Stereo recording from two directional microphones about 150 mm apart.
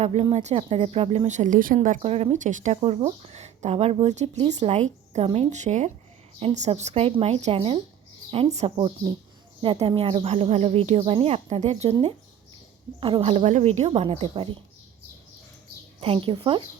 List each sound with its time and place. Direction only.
0.0 s a woman's voice: 45° right (ahead or behind); by 2.0 s 60° right (ahead or behind)
2.0 s a woman's voice: 40° right (ahead or behind); by 2.7 s 55° right (ahead or behind)
2.8 s a woman's voice: 40° right (ahead or behind)
13.0 s speech: 35° right (ahead or behind)
16.0 s speech: 40° right (ahead or behind)